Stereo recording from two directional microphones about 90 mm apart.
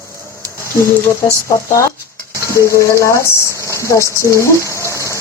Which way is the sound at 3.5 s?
35° right (ahead or behind).